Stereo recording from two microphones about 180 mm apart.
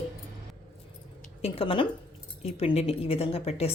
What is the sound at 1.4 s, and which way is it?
A woman's voice, 30° left (ahead or behind).